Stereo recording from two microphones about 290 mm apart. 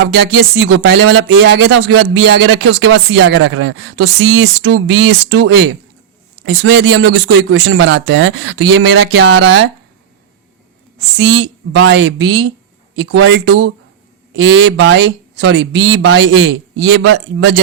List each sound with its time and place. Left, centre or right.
0.0 s speech: right
11.2 s speech: right